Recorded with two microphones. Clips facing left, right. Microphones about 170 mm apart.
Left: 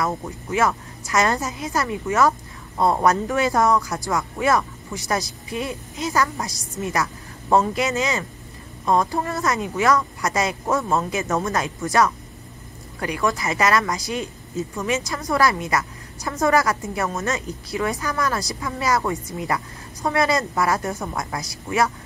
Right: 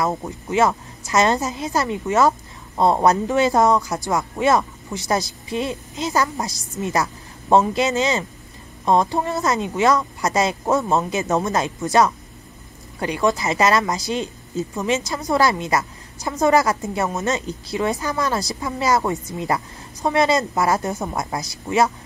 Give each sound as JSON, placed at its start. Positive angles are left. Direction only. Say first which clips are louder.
{"t": 0.0, "sound": "a woman's voice", "louder": "right 2 dB", "side_deg": -25}